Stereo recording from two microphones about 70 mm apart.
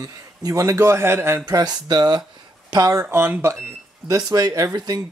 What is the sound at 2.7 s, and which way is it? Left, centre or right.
Speech, right.